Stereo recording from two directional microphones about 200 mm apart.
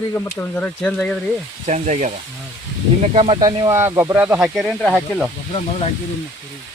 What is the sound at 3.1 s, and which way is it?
Speech, 25° right (ahead or behind).